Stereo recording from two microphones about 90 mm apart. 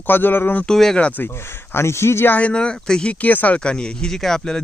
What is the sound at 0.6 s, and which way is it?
Speech, 5° left (ahead or behind).